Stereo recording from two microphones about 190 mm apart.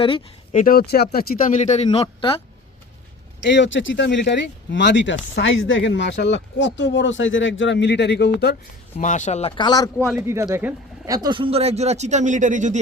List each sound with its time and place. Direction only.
0.5 s a man's voice: 50° left (ahead or behind); by 2.4 s 30° left (ahead or behind)
3.4 s speech: 70° left (ahead or behind)
9.0 s speech: 40° left (ahead or behind)
9.6 s speech: 20° left (ahead or behind)
10.5 s speech: 10° right (ahead or behind)
11.1 s speech: 20° right (ahead or behind); by 12.8 s 40° right (ahead or behind)